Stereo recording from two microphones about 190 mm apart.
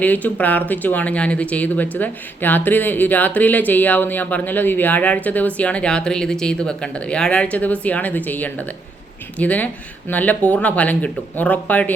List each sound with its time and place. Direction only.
0.0 s speech: 10° left (ahead or behind)